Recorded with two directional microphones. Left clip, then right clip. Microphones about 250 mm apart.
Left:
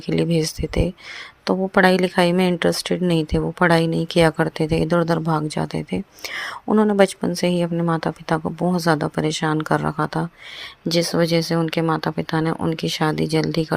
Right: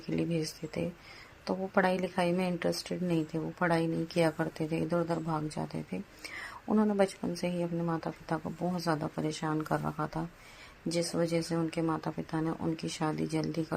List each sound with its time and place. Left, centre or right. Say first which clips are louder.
0.1 s speech: left 13 dB; left